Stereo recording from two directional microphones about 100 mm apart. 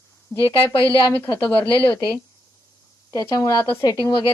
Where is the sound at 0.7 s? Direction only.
35° right (ahead or behind).